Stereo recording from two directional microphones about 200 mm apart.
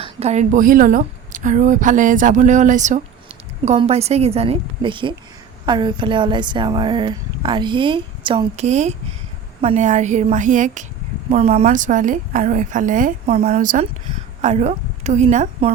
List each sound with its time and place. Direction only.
0.0 s a woman's voice: 30° right (ahead or behind)